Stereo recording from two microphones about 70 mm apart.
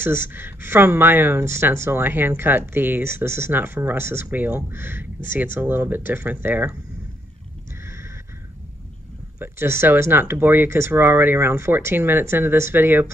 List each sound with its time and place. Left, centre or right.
0.0 s speech: right
7.8 s a sound: right
9.4 s speech: right